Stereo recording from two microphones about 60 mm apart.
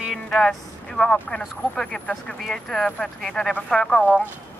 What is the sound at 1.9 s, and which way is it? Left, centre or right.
Speech, left.